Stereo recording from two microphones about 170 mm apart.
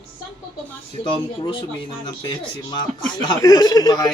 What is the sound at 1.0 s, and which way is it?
A man's voice, 30° left (ahead or behind).